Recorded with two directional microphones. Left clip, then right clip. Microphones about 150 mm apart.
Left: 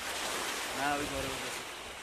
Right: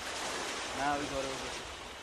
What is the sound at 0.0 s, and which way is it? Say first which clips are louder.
Ocean: left 2 dB; 25° left (ahead or behind).